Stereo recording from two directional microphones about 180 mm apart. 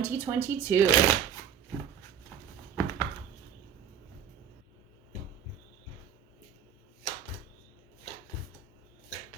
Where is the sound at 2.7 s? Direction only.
15° left (ahead or behind).